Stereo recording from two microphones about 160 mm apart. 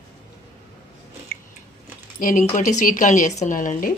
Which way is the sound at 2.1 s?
55° left (ahead or behind).